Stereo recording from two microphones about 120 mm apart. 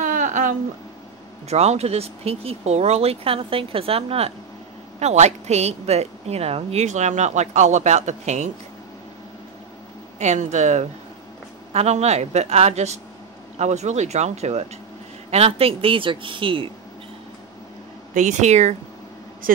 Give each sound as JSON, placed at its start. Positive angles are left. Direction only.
{"t": 0.0, "sound": "a sound", "side_deg": -90}
{"t": 1.5, "sound": "speech", "side_deg": -60}
{"t": 5.0, "sound": "a woman's voice", "side_deg": -70}
{"t": 10.1, "sound": "a woman's voice", "side_deg": -75}
{"t": 18.1, "sound": "a woman's voice", "side_deg": -85}